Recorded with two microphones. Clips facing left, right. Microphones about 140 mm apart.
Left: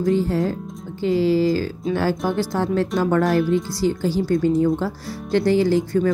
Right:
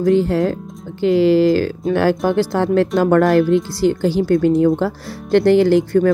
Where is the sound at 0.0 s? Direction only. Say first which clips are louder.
Right 5 dB; 70° right (ahead or behind).